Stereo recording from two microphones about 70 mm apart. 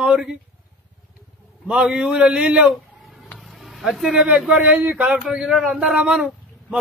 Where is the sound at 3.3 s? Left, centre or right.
Centre.